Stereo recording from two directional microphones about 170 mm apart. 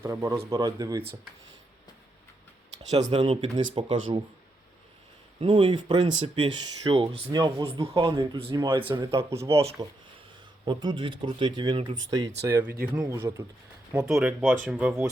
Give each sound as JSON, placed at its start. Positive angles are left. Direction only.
{"t": 0.0, "sound": "speech", "side_deg": -15}
{"t": 2.9, "sound": "speech", "side_deg": -35}
{"t": 5.4, "sound": "speech", "side_deg": -30}
{"t": 9.1, "sound": "speech", "side_deg": -15}
{"t": 9.5, "sound": "speech", "side_deg": -35}
{"t": 13.9, "sound": "speech", "side_deg": -5}